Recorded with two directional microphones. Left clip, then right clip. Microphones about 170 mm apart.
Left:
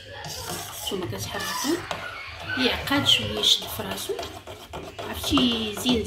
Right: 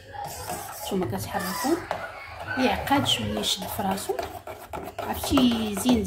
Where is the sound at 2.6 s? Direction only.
90° right.